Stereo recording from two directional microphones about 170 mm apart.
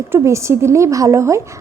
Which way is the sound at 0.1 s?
15° right (ahead or behind).